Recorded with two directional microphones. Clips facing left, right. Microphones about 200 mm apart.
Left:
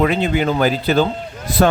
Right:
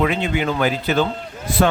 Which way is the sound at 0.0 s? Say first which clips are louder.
Left 3 dB; 40° left (ahead or behind).